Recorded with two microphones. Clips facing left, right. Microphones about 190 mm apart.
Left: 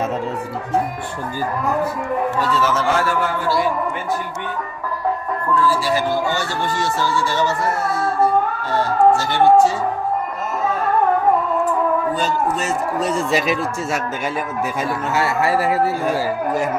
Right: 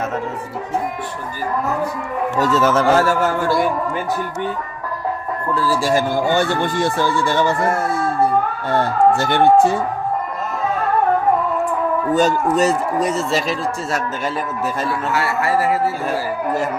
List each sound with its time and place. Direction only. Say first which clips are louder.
2.4 s speech: right 4 dB; 45° right (ahead or behind)
5.5 s speech: right 2 dB; 40° right (ahead or behind)
12.1 s speech: right 5 dB; 40° right (ahead or behind)
13.1 s speech: left 1 dB; 15° left (ahead or behind)
14.8 s speech: left 1 dB; 20° left (ahead or behind)